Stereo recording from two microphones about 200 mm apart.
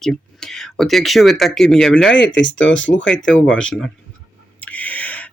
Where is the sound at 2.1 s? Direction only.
65° left (ahead or behind).